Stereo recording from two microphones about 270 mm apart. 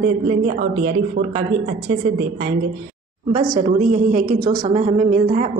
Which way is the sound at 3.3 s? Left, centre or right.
Right.